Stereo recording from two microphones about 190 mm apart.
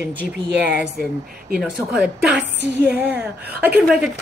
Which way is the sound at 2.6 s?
60° right (ahead or behind).